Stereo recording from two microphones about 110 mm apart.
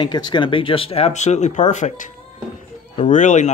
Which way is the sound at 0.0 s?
40° left (ahead or behind).